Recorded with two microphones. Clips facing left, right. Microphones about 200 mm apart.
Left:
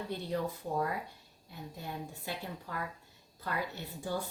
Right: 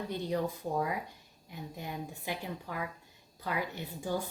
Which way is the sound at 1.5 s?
15° right (ahead or behind).